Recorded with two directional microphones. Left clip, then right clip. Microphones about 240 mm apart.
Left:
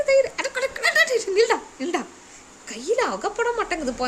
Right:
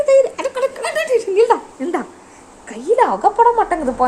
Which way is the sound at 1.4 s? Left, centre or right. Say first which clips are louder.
Right 7 dB; centre.